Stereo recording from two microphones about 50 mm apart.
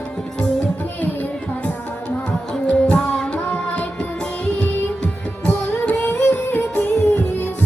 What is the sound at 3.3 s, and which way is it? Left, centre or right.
Music, left.